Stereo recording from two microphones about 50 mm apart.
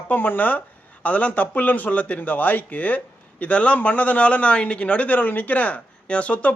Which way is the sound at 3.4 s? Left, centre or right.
Left.